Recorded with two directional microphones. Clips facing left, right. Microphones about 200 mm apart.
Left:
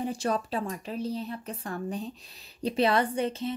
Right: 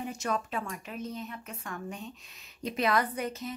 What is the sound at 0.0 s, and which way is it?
Speech, 35° left (ahead or behind).